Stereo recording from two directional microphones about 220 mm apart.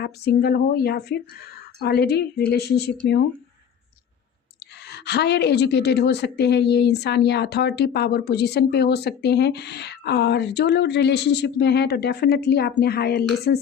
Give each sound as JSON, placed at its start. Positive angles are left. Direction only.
{"t": 0.0, "sound": "a woman's voice", "side_deg": 45}
{"t": 4.9, "sound": "a woman's voice", "side_deg": 50}